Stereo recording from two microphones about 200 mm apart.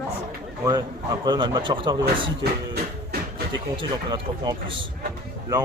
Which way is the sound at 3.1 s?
50° right (ahead or behind).